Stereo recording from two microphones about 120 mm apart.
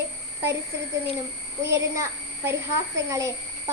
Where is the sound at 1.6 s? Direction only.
25° right (ahead or behind).